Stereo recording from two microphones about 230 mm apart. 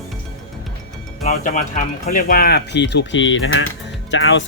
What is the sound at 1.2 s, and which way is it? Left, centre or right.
Speech, left.